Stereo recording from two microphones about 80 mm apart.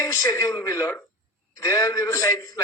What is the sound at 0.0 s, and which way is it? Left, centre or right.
A man's voice, left.